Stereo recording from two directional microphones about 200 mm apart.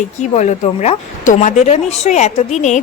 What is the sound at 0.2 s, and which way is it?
A woman's voice, 35° left (ahead or behind).